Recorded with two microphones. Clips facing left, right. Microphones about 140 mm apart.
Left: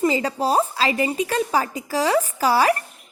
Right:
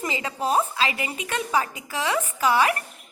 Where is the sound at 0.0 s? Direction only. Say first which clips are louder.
Left 7 dB; 35° left (ahead or behind).